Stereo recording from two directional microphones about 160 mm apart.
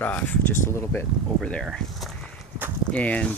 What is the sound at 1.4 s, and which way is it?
Speech, 5° left (ahead or behind).